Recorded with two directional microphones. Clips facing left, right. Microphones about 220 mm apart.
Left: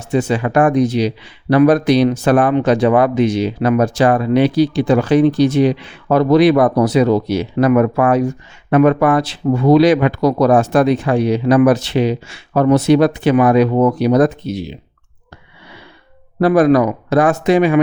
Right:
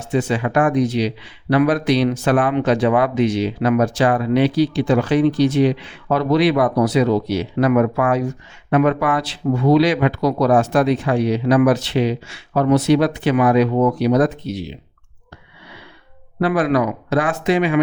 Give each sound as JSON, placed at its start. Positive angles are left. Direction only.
{"t": 0.1, "sound": "speech", "side_deg": 40}
{"t": 16.4, "sound": "speech", "side_deg": 45}